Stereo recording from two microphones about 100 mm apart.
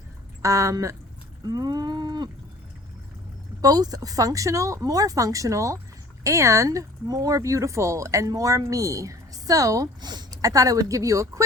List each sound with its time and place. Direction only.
0.4 s speech: 30° right (ahead or behind)
1.5 s cattle: 40° right (ahead or behind)
3.6 s speech: 40° right (ahead or behind)